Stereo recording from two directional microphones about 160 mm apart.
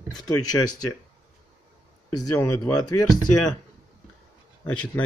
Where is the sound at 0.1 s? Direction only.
25° left (ahead or behind).